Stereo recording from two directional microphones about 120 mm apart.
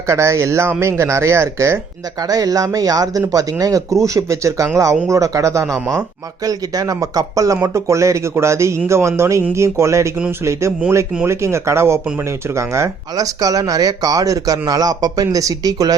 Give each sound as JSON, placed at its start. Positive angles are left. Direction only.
{"t": 0.1, "sound": "speech", "side_deg": -25}